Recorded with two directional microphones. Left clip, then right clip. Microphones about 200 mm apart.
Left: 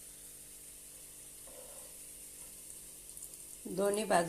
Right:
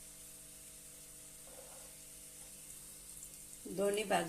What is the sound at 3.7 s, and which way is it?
Speech, 15° left (ahead or behind).